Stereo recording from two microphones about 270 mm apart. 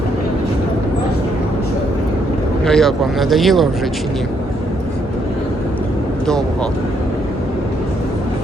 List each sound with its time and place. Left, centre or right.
2.6 s speech: centre